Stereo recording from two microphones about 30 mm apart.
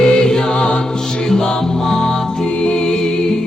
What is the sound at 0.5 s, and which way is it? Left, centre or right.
Music, left.